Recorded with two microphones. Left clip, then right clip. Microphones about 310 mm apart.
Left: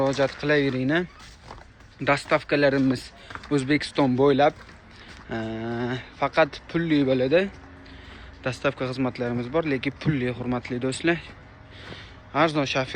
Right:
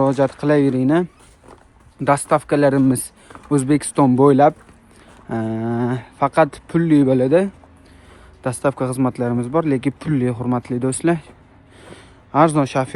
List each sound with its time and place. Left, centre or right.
0.1 s speech: right
2.0 s speech: centre
8.6 s speech: centre
11.8 s a sound: right